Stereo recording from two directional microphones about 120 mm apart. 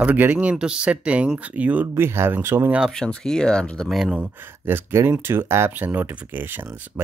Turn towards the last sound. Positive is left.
turn(degrees=-15)  # may be behind; listen again after turning